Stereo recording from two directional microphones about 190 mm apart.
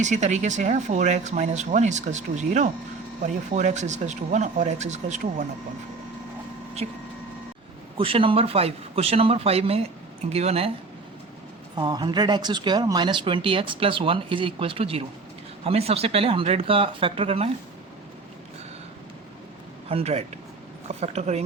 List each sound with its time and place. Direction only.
0.0 s speech: 40° right (ahead or behind)
6.8 s speech: 35° right (ahead or behind)
11.7 s speech: 20° right (ahead or behind)
19.9 s speech: 35° right (ahead or behind)